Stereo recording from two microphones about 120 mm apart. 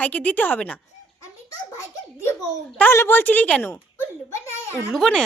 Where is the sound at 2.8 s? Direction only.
20° left (ahead or behind).